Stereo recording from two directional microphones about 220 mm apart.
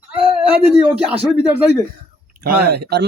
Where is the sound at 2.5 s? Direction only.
45° right (ahead or behind).